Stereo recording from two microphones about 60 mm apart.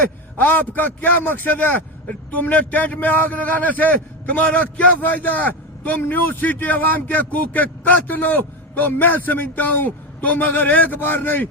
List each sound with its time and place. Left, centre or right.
0.0 s a man's voice: left